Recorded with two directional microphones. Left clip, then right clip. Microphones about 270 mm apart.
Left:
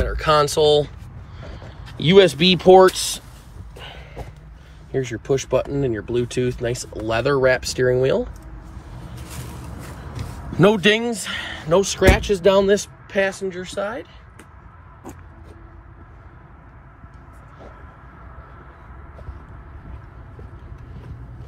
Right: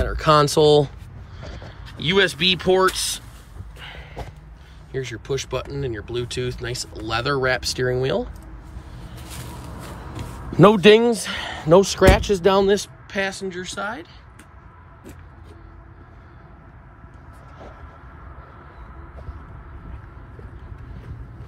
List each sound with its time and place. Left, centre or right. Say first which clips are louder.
0.0 s speech: right 1 dB; centre
1.5 s speech: even; centre
3.7 s a sound: even; centre
4.9 s speech: left 5 dB; centre
10.5 s speech: right 4 dB; centre